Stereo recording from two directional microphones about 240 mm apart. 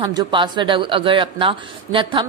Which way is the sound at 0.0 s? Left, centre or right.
Centre.